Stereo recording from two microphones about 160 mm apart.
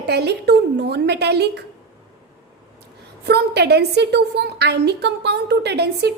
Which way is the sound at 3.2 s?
90° right.